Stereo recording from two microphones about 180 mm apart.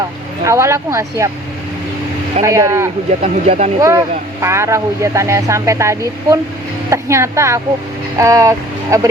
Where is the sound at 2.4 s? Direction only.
15° right (ahead or behind).